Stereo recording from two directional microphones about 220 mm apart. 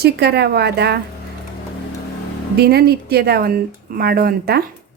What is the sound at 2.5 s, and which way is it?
Speech, 45° right (ahead or behind).